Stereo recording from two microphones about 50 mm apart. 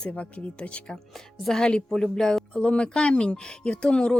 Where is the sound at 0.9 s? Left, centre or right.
Centre.